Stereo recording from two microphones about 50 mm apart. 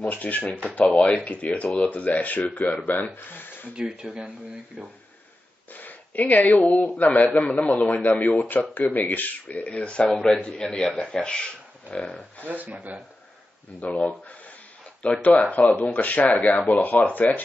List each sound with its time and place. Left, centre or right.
0.0 s a man's voice: left
3.8 s speech: centre
5.7 s a sound: left
7.0 s a man's voice: left
12.4 s speech: right
13.8 s speech: left
15.2 s speech: left